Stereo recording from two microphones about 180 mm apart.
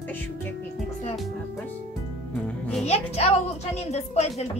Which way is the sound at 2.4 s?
5° left (ahead or behind).